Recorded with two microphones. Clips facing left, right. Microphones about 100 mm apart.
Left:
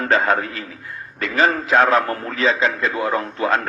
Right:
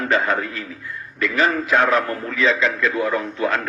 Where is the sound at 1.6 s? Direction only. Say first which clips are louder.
Left 2 dB; 30° left (ahead or behind).